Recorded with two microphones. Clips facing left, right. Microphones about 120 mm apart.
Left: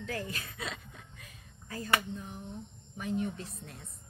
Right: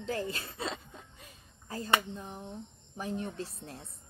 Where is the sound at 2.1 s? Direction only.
30° right (ahead or behind).